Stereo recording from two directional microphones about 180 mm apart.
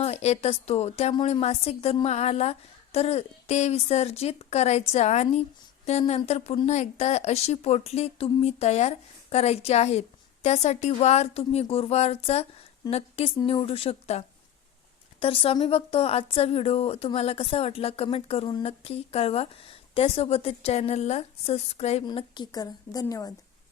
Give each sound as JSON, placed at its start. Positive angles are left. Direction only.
{"t": 0.0, "sound": "a woman's voice", "side_deg": 35}
{"t": 22.0, "sound": "a woman's voice", "side_deg": 25}